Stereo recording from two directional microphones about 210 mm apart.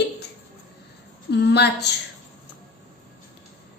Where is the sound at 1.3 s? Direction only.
55° left (ahead or behind).